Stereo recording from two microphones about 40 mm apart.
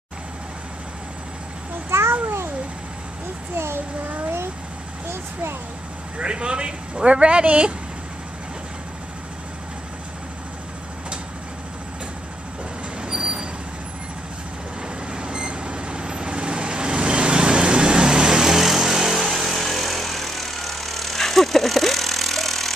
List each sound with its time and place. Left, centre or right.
1.9 s babbling: right
2.2 s babbling: right
3.5 s a child's voice: right
6.1 s speech: right
13.0 s vehicle: right
14.8 s vehicle: right; by 22.8 s centre